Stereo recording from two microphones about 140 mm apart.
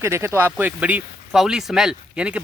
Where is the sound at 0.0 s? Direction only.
20° right (ahead or behind).